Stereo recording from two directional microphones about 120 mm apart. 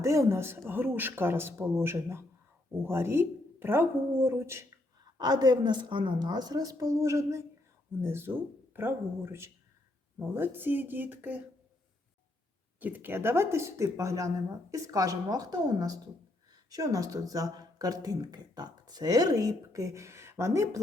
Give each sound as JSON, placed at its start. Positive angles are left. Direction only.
{"t": 0.0, "sound": "speech", "side_deg": -25}
{"t": 5.1, "sound": "a woman's voice", "side_deg": -35}
{"t": 12.8, "sound": "speech", "side_deg": -15}